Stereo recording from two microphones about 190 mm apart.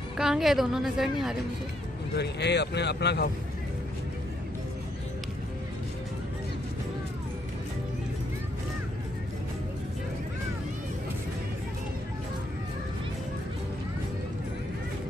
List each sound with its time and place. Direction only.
0.2 s a woman's voice: centre (ahead or behind)
2.1 s speech: 65° left (ahead or behind)